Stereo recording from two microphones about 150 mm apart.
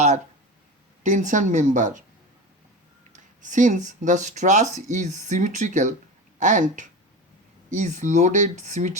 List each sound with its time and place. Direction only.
1.0 s speech: 55° right (ahead or behind)
3.1 s speech: 55° right (ahead or behind)